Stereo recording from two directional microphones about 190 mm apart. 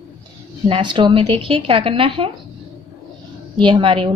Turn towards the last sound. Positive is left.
turn(degrees=-25)  # may be behind; listen again after turning